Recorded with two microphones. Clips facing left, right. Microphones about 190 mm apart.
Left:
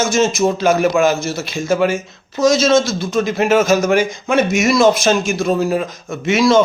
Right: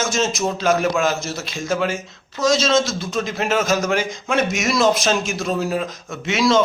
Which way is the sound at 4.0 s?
55° left (ahead or behind).